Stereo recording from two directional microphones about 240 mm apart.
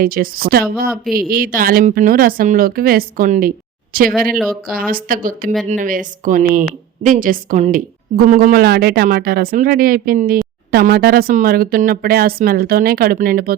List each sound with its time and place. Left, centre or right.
0.0 s speech: right